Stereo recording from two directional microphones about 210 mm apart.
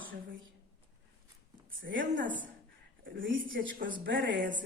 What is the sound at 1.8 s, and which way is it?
Speech, 65° right (ahead or behind).